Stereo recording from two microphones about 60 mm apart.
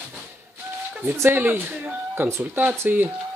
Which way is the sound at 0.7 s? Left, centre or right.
Right.